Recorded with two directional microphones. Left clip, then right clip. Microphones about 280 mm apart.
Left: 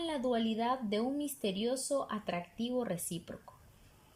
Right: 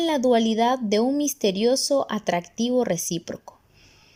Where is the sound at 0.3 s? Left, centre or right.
Right.